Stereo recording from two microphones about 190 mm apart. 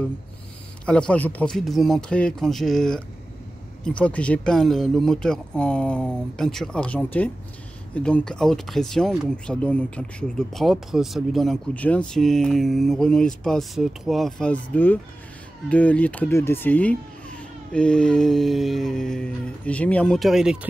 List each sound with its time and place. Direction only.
0.8 s speech: 5° left (ahead or behind)